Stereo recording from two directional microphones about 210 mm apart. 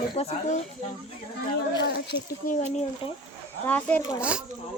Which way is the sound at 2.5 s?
35° left (ahead or behind).